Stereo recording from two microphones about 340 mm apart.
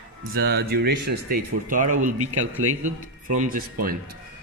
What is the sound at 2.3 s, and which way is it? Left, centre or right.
Speech, right.